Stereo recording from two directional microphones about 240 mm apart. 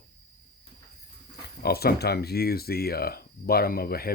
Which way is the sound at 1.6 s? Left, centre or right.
Left.